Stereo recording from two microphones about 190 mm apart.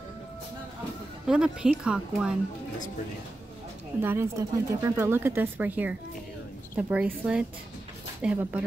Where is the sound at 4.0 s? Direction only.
10° right (ahead or behind).